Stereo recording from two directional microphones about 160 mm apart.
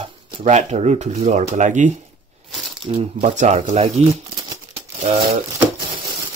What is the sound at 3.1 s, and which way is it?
Speech, 50° right (ahead or behind).